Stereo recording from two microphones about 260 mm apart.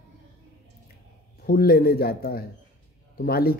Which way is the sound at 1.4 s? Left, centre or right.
Left.